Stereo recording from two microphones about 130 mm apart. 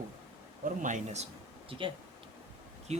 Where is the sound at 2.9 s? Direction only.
55° right (ahead or behind).